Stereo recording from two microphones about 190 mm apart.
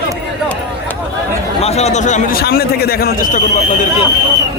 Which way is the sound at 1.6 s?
35° left (ahead or behind).